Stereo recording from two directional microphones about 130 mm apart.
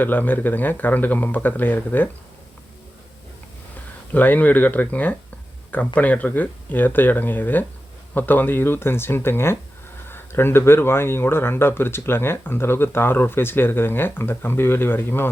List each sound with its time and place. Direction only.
0.0 s speech: 15° left (ahead or behind)
4.1 s speech: 15° left (ahead or behind)